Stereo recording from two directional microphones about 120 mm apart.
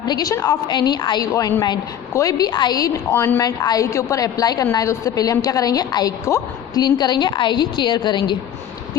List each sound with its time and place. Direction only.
0.0 s a woman's voice: 35° left (ahead or behind)
3.1 s a woman's voice: 20° left (ahead or behind); by 8.4 s 40° left (ahead or behind)